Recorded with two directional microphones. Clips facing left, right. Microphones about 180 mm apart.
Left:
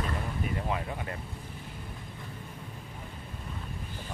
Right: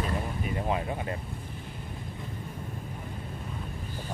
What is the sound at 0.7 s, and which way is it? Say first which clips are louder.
Vehicle: right 3 dB; 25° right (ahead or behind).